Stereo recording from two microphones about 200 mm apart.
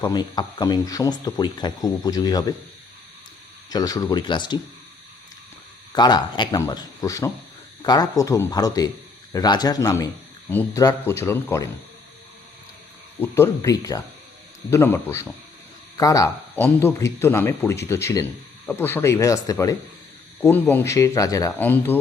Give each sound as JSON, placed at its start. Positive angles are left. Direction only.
{"t": 0.0, "sound": "speech", "side_deg": 20}
{"t": 3.7, "sound": "speech", "side_deg": 20}
{"t": 5.9, "sound": "speech", "side_deg": 20}
{"t": 13.1, "sound": "speech", "side_deg": 10}